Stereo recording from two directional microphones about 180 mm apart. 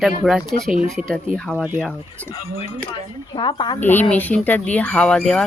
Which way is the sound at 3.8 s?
10° left (ahead or behind).